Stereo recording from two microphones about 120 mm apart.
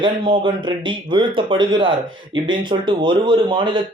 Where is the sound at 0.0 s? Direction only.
40° right (ahead or behind).